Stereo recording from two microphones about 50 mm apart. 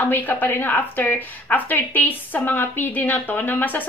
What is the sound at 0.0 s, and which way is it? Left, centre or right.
A woman's voice, left.